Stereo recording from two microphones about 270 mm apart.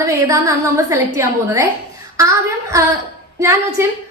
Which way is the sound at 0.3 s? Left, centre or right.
Centre.